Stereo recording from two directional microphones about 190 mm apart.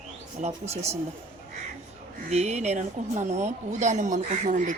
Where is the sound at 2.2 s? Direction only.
35° right (ahead or behind).